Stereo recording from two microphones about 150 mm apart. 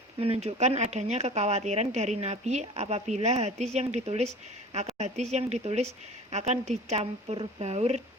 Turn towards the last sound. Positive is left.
turn(degrees=-45)  # may be behind; listen again after turning